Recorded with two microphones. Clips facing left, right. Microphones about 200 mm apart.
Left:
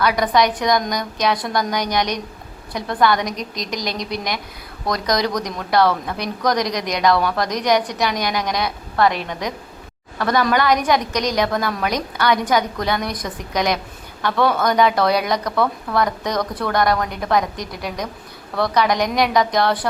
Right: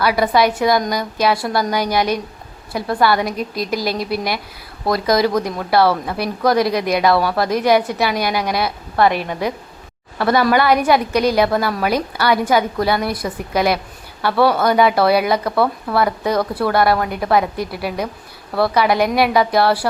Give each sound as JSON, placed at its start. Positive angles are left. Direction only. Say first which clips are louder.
{"t": 0.0, "sound": "a woman's voice", "louder": "right 2 dB", "side_deg": -5}